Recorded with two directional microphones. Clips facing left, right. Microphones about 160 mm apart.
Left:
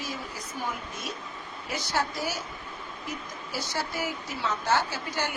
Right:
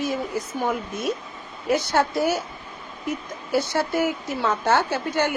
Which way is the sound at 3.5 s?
60° right (ahead or behind).